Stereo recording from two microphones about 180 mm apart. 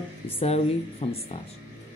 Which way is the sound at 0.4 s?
35° left (ahead or behind).